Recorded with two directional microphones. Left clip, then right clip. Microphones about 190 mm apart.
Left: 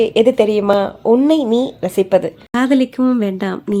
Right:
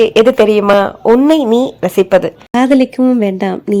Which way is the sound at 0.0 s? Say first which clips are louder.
Right 4 dB; 5° right (ahead or behind).